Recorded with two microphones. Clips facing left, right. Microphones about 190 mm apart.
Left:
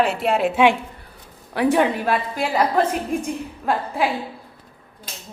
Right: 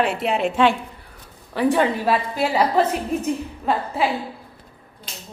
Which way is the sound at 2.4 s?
5° right (ahead or behind).